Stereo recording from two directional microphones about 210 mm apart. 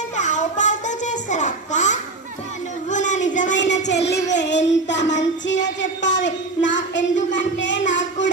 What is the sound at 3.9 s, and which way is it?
Music, 55° left (ahead or behind).